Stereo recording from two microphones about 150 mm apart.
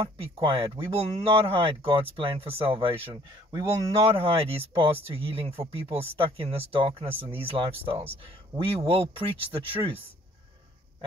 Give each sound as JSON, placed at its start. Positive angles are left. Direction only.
{"t": 0.0, "sound": "speech", "side_deg": -35}
{"t": 4.1, "sound": "speech", "side_deg": -40}